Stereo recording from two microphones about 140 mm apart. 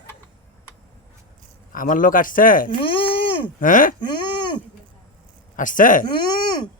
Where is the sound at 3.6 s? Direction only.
75° left (ahead or behind).